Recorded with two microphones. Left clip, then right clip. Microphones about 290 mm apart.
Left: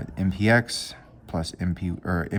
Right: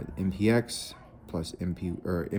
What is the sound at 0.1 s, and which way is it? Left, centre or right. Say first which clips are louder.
Speech: left 5 dB; left.